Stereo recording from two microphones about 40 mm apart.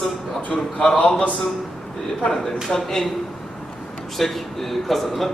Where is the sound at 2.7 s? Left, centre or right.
Centre.